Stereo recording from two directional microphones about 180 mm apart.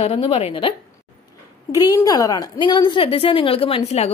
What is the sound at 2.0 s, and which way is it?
A woman's voice, 20° left (ahead or behind).